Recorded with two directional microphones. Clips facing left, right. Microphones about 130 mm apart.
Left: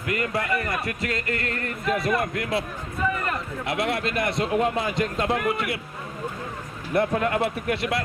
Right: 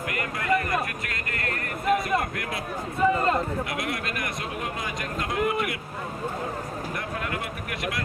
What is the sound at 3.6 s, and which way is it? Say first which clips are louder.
A man's voice: left 5 dB; 25° left (ahead or behind).